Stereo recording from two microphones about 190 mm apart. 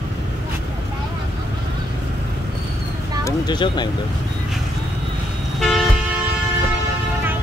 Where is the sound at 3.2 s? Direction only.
20° left (ahead or behind).